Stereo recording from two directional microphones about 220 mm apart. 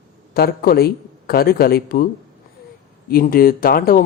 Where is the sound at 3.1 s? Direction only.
40° left (ahead or behind).